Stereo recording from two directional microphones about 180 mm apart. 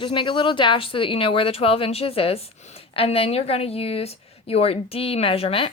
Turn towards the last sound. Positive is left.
turn(degrees=30)  # may be behind; listen again after turning